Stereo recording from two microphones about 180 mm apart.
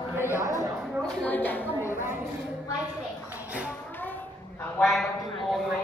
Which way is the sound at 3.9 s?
10° left (ahead or behind).